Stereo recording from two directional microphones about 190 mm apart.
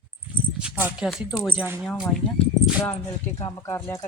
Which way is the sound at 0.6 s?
5° right (ahead or behind).